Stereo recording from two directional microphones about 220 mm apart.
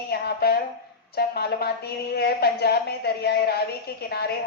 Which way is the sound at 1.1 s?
45° left (ahead or behind).